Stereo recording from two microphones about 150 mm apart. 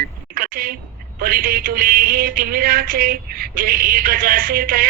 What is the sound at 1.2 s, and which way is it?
Speech, 75° right (ahead or behind).